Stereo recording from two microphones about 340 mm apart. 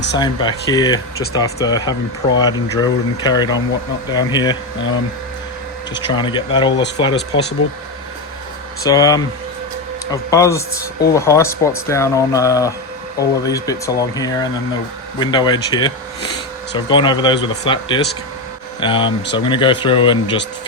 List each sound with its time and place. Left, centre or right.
0.2 s speech: centre
6.1 s speech: centre
7.6 s speech: left
8.8 s speech: centre